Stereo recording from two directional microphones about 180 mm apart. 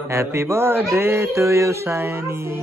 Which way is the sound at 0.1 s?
15° right (ahead or behind).